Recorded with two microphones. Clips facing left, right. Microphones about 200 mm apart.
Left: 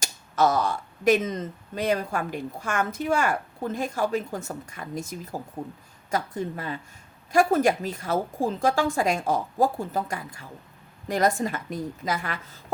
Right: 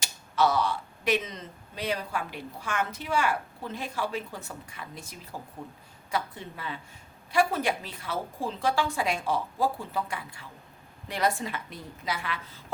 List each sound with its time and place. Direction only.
0.0 s speech: 45° left (ahead or behind)